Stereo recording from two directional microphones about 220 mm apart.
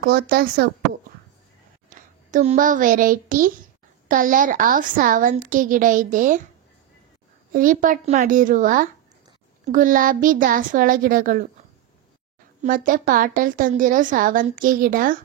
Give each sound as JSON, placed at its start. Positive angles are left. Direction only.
{"t": 0.0, "sound": "speech", "side_deg": -45}
{"t": 1.9, "sound": "a child's voice", "side_deg": -35}
{"t": 7.5, "sound": "a woman's voice", "side_deg": -35}
{"t": 12.6, "sound": "a woman's voice", "side_deg": -40}